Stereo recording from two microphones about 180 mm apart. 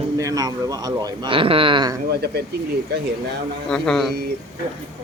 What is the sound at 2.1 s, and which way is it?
Speech, 65° right (ahead or behind).